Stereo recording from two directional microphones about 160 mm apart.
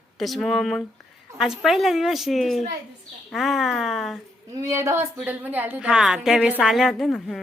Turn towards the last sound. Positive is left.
turn(degrees=0)  # may be behind; listen again after turning